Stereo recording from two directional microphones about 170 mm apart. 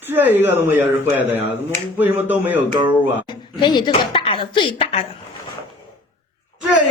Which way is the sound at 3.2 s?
25° left (ahead or behind).